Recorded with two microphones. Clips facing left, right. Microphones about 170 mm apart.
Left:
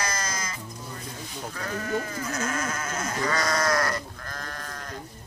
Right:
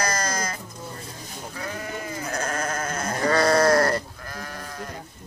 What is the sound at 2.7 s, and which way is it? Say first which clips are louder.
Sheep: right 4 dB; 55° right (ahead or behind).